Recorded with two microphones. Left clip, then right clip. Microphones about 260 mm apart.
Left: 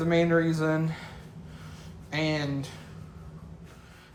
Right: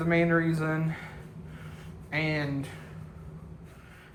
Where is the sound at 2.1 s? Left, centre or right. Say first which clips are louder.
Left 1 dB; left.